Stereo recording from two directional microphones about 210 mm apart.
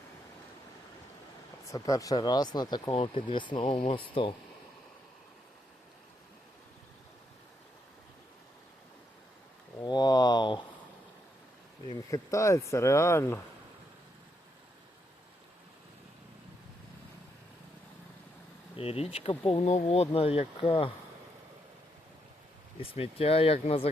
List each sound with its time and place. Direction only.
1.7 s speech: 15° left (ahead or behind)
9.8 s a sound: 20° left (ahead or behind)
11.9 s speech: 15° left (ahead or behind)
18.8 s speech: 25° left (ahead or behind)
22.8 s speech: 25° left (ahead or behind)